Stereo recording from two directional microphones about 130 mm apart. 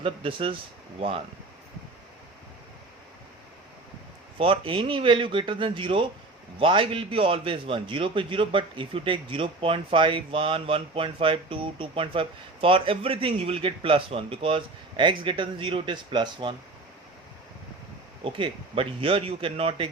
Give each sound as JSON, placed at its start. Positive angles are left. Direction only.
{"t": 0.0, "sound": "a man's voice", "side_deg": -45}
{"t": 4.4, "sound": "a man's voice", "side_deg": -45}
{"t": 18.2, "sound": "a man's voice", "side_deg": -40}